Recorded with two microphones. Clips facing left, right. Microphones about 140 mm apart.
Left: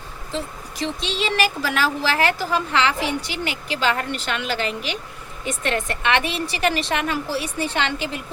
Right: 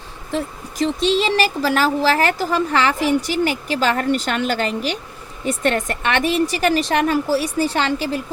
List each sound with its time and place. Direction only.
0.8 s speech: 40° right (ahead or behind)